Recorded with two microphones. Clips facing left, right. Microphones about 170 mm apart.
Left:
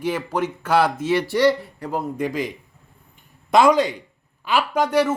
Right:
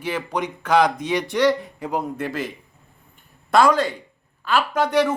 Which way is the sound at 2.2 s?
15° left (ahead or behind).